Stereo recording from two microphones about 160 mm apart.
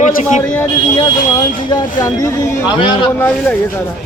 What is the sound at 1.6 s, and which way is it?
Speech, 25° left (ahead or behind).